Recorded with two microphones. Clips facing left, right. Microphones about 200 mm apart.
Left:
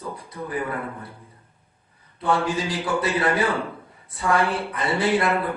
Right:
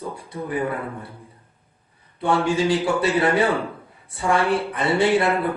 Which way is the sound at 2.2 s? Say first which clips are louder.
Right 3 dB; 30° right (ahead or behind).